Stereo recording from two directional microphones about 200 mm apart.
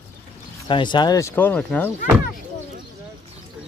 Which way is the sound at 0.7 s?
25° left (ahead or behind).